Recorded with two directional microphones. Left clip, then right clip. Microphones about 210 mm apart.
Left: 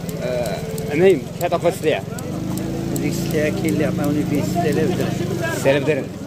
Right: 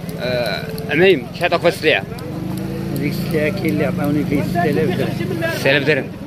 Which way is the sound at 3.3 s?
40° right (ahead or behind).